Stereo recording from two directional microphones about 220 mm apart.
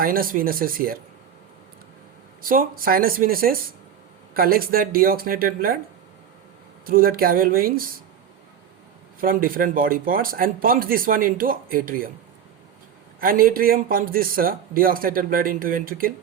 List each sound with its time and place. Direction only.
0.0 s a man's voice: 40° right (ahead or behind)
2.4 s a man's voice: 40° right (ahead or behind)
6.8 s a man's voice: 40° right (ahead or behind)
9.2 s a man's voice: 40° right (ahead or behind)
13.1 s a man's voice: 40° right (ahead or behind)